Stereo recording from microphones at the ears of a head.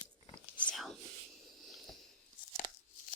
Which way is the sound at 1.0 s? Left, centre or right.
Right.